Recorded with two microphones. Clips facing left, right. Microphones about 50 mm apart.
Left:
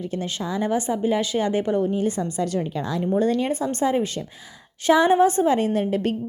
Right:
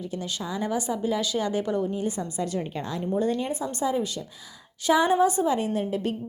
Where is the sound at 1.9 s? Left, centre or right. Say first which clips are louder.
Left 5 dB; left.